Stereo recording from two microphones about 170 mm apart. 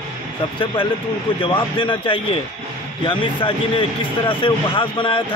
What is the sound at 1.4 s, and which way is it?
Speech, 30° left (ahead or behind).